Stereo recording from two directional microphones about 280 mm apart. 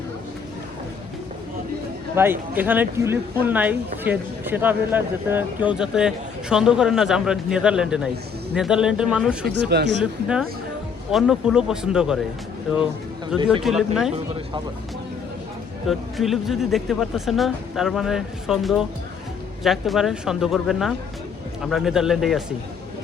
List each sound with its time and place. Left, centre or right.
2.1 s speech: centre
9.5 s speech: right
10.0 s speech: centre
13.3 s speech: centre
15.9 s speech: centre